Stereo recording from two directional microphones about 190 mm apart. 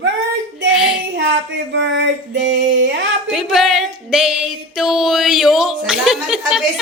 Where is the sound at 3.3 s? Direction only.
Centre (ahead or behind).